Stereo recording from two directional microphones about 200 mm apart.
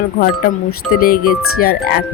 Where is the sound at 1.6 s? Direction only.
50° left (ahead or behind).